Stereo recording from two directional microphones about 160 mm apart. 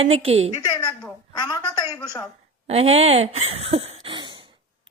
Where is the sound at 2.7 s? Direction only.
40° right (ahead or behind).